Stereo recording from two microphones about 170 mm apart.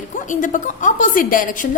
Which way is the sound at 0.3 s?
50° left (ahead or behind).